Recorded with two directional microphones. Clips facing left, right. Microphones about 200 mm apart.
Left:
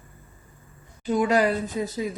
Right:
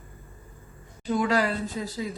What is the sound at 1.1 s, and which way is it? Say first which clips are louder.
Speech: left 3 dB; 20° left (ahead or behind).